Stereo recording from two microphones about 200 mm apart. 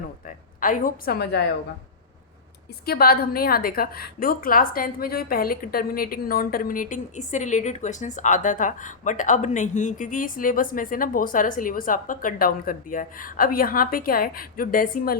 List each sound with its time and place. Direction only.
0.3 s a woman's voice: 40° left (ahead or behind)
2.8 s a woman's voice: 50° left (ahead or behind)